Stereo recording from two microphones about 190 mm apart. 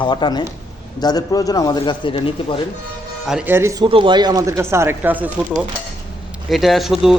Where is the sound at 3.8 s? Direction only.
25° right (ahead or behind); by 5.3 s 10° right (ahead or behind).